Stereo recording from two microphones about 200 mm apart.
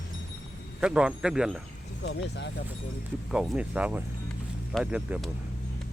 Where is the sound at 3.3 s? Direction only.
Centre (ahead or behind).